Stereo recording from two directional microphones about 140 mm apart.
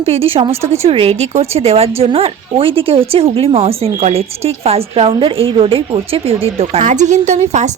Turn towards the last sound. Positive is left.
turn(degrees=-55)  # may be behind; listen again after turning